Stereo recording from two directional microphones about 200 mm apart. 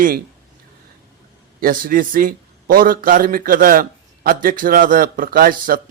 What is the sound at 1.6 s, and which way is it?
A man's voice, 45° right (ahead or behind).